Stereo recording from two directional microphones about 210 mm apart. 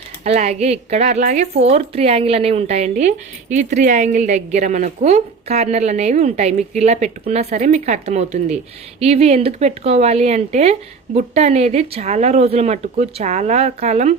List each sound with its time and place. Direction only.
0.3 s speech: 30° right (ahead or behind)